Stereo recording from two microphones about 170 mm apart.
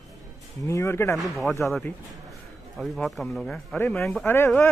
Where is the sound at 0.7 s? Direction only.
15° left (ahead or behind).